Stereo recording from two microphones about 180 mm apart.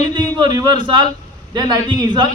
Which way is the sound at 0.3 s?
25° right (ahead or behind).